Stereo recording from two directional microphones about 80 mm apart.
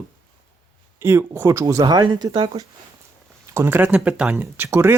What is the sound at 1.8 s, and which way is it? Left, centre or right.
Speech, right.